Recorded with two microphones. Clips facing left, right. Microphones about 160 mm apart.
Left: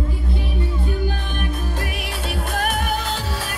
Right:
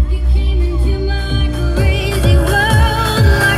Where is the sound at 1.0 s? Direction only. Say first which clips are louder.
Right 5 dB; 90° right.